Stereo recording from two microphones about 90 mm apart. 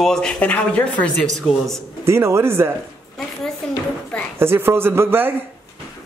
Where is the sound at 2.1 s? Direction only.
30° right (ahead or behind).